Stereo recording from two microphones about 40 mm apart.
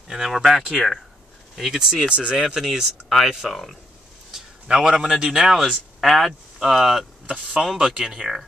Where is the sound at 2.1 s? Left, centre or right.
Right.